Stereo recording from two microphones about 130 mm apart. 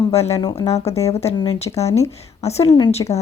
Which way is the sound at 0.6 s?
50° left (ahead or behind).